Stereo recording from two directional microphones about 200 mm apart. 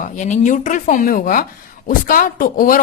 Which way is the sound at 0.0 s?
40° left (ahead or behind).